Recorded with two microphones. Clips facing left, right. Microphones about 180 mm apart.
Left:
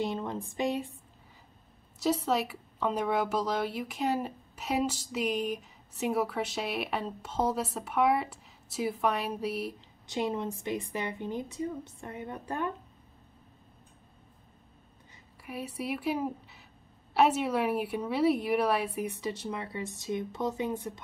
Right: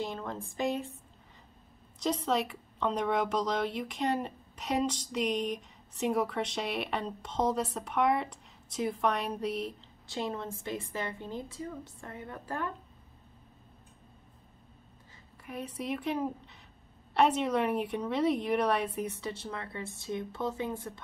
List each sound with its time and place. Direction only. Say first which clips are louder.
0.0 s a woman's voice: left 4 dB; 15° left (ahead or behind)
2.0 s speech: left 2 dB; 5° left (ahead or behind)
15.4 s a woman's voice: left 1 dB; 10° left (ahead or behind)